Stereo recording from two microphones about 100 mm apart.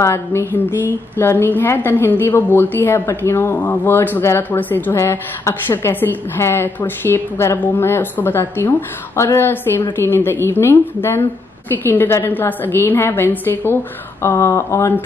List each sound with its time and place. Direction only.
0.0 s a woman's voice: 25° left (ahead or behind)